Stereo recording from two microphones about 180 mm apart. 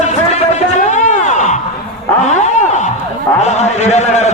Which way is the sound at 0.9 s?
40° left (ahead or behind).